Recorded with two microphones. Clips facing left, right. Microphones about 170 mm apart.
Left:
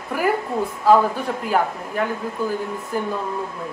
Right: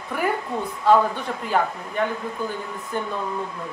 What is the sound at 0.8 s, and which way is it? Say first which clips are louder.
A woman's voice: left 2 dB; 5° left (ahead or behind).